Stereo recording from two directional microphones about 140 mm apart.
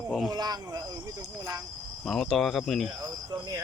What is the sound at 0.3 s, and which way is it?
Speech, 30° right (ahead or behind).